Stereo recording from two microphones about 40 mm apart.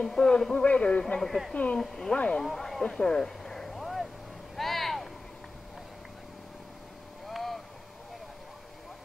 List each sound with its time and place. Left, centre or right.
0.0 s speech: centre
0.6 s a man's voice: left
1.5 s speech: left
1.8 s speech: centre
3.0 s a sound: centre
7.2 s vehicle: centre